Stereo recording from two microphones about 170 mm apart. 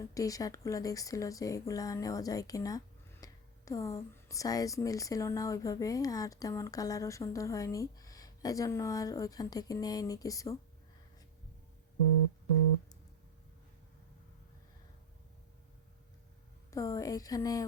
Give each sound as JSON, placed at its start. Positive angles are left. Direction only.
{"t": 0.1, "sound": "speech", "side_deg": 20}
{"t": 16.7, "sound": "speech", "side_deg": 20}